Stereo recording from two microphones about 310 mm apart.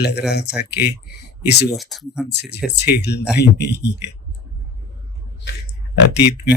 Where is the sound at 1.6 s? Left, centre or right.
Centre.